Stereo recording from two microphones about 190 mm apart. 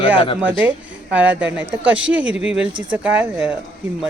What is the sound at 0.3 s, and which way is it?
Speech, 10° right (ahead or behind).